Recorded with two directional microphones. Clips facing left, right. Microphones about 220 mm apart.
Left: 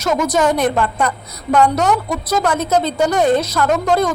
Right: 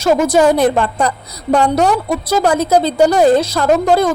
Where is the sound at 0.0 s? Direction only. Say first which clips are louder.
Right 5 dB; 30° right (ahead or behind).